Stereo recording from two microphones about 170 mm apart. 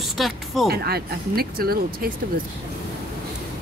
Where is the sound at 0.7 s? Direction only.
65° right (ahead or behind).